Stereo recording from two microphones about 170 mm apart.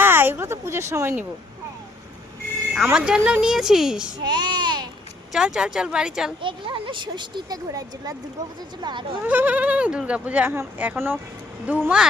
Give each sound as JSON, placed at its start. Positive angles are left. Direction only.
{"t": 0.0, "sound": "a sound", "side_deg": -10}
{"t": 2.7, "sound": "speech", "side_deg": -5}
{"t": 4.2, "sound": "a child's voice", "side_deg": -25}
{"t": 5.3, "sound": "speech", "side_deg": -5}
{"t": 6.4, "sound": "speech", "side_deg": -30}
{"t": 9.2, "sound": "speech", "side_deg": -10}